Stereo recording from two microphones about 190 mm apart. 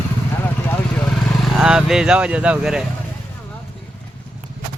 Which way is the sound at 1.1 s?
Centre (ahead or behind).